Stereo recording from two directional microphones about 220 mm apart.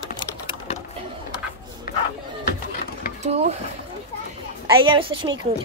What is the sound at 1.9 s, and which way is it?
Crowd, 40° left (ahead or behind).